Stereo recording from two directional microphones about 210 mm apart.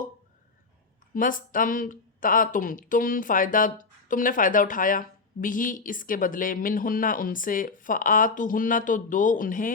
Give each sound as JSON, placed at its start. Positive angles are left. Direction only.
{"t": 1.1, "sound": "a woman's voice", "side_deg": 40}